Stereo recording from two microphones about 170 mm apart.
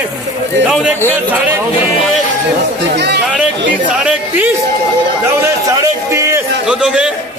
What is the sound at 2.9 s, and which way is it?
Speech, 80° right.